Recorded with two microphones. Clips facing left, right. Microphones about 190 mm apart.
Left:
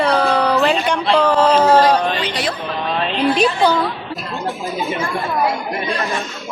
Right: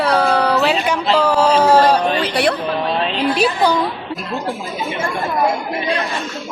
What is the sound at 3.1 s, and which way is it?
Speech, 5° right (ahead or behind).